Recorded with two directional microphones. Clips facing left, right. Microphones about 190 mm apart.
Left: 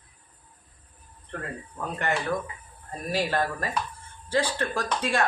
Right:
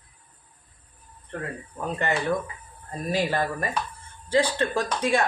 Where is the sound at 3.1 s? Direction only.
15° right (ahead or behind).